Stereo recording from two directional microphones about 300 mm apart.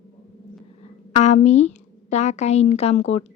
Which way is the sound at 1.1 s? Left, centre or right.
Left.